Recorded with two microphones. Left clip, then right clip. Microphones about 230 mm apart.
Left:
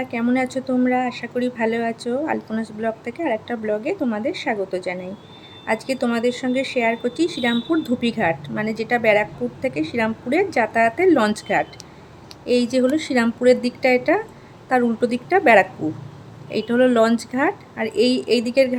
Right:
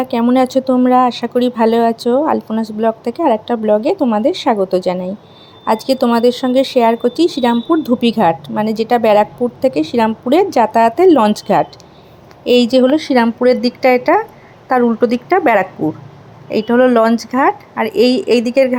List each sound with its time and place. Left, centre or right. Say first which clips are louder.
0.1 s a woman's voice: right 10 dB; right